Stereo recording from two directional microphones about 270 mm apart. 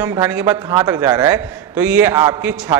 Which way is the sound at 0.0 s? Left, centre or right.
Centre.